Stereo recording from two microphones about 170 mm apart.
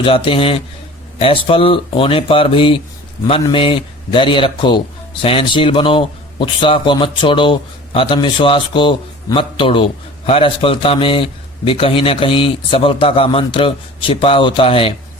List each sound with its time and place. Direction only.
0.0 s a man's voice: 30° left (ahead or behind)